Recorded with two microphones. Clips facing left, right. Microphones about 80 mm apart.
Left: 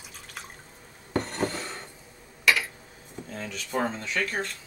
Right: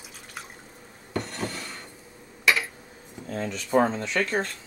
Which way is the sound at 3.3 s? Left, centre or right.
Right.